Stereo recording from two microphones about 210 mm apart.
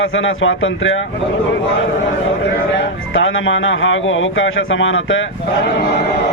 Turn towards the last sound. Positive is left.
turn(degrees=65)  # may be behind; listen again after turning